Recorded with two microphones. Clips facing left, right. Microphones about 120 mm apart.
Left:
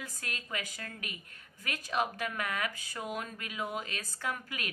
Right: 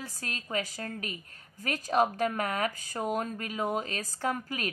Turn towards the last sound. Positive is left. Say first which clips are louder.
# right 6 dB
turn(degrees=-40)  # may be behind; listen again after turning